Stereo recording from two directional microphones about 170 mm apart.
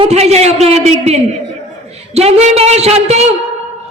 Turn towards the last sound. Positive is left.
turn(degrees=-40)  # may be behind; listen again after turning